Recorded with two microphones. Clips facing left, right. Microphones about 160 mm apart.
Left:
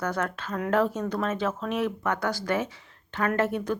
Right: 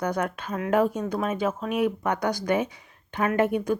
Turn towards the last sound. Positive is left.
turn(degrees=-15)  # may be behind; listen again after turning